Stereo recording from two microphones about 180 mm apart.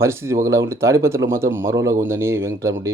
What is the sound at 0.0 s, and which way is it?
Speech, 15° right (ahead or behind).